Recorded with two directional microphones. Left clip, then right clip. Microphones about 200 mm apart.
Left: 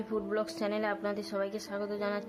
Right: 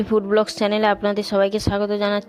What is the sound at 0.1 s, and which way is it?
A woman's voice, 40° right (ahead or behind).